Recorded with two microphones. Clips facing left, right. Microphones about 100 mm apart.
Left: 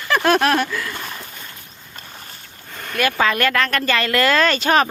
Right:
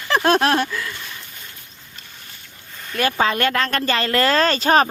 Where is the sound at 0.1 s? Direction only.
25° right (ahead or behind).